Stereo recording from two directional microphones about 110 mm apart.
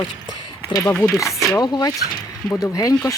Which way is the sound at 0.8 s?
20° left (ahead or behind).